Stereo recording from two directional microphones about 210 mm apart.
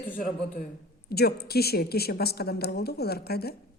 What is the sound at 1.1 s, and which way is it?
Speech, 50° left (ahead or behind).